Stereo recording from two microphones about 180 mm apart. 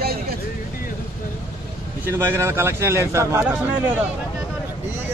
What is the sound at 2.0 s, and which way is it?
Speech, 15° right (ahead or behind).